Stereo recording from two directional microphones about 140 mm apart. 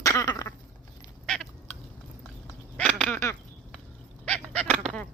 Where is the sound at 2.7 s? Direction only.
10° left (ahead or behind).